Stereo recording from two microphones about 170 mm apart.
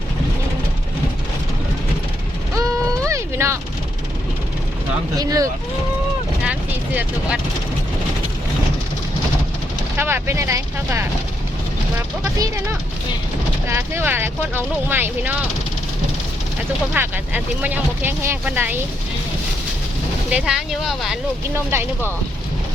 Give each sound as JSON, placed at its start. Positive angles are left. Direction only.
{"t": 2.6, "sound": "a sound", "side_deg": -20}
{"t": 5.1, "sound": "speech", "side_deg": -20}
{"t": 6.4, "sound": "vehicle", "side_deg": -5}
{"t": 10.0, "sound": "speech", "side_deg": -15}
{"t": 13.7, "sound": "speech", "side_deg": -15}
{"t": 16.9, "sound": "speech", "side_deg": -10}
{"t": 20.3, "sound": "speech", "side_deg": -5}
{"t": 21.5, "sound": "speech", "side_deg": -15}